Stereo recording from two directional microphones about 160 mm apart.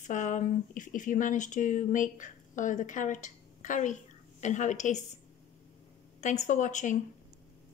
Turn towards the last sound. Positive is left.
turn(degrees=50)  # may be behind; listen again after turning